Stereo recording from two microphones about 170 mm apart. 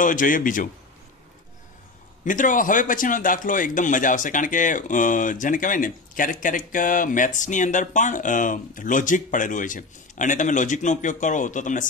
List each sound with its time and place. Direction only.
0.0 s a man's voice: 50° left (ahead or behind)
2.2 s a man's voice: 50° left (ahead or behind)